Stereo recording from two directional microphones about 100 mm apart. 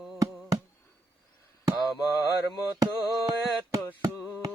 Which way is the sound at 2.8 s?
35° right (ahead or behind).